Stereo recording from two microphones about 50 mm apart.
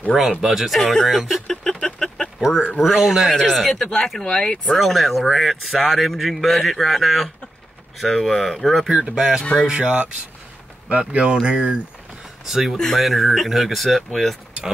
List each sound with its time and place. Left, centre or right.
0.1 s speech: centre
1.8 s a sound: centre
2.8 s speech: centre
3.3 s speech: centre
4.6 s speech: centre
8.8 s speech: centre
9.4 s speech: centre
9.7 s speech: right
12.4 s speech: centre